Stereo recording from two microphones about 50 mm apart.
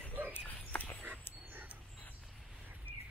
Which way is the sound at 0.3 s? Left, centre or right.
Left.